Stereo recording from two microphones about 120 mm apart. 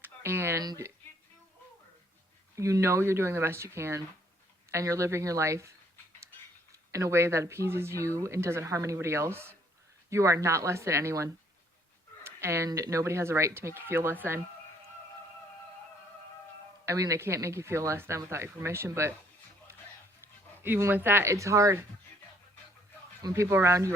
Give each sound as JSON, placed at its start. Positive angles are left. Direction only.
{"t": 0.0, "sound": "a sound", "side_deg": -20}
{"t": 0.6, "sound": "speech", "side_deg": -30}
{"t": 2.6, "sound": "speech", "side_deg": -25}
{"t": 6.9, "sound": "speech", "side_deg": -25}
{"t": 16.8, "sound": "speech", "side_deg": -25}
{"t": 20.6, "sound": "speech", "side_deg": -20}
{"t": 23.2, "sound": "speech", "side_deg": -25}